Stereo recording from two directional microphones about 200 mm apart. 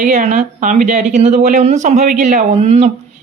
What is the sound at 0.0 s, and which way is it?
Speech, 40° right (ahead or behind).